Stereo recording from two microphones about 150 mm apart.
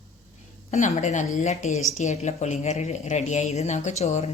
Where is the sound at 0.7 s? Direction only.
55° left (ahead or behind).